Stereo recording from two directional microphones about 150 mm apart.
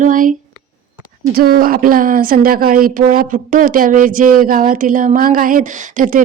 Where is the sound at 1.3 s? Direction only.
80° right.